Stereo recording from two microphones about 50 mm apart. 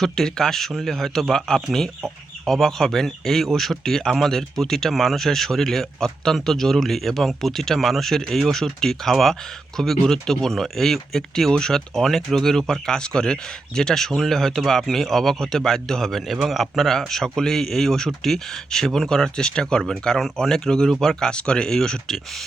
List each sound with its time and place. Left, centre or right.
0.0 s speech: centre
17.1 s speech: centre